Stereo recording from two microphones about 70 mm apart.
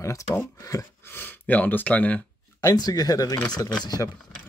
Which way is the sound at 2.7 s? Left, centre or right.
Left.